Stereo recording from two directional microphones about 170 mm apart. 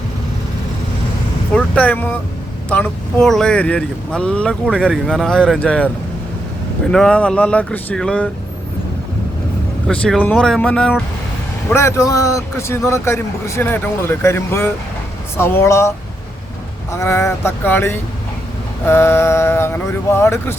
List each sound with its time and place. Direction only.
1.5 s speech: 10° left (ahead or behind)
6.9 s a man's voice: 5° left (ahead or behind)
9.8 s speech: 5° left (ahead or behind)
11.7 s a man's voice: 15° left (ahead or behind)
16.9 s a man's voice: 15° left (ahead or behind)